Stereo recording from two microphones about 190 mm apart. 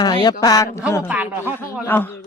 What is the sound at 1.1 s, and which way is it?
Speech, 10° right (ahead or behind).